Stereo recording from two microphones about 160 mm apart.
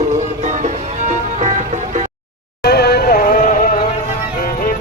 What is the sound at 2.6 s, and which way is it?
Music, 85° left.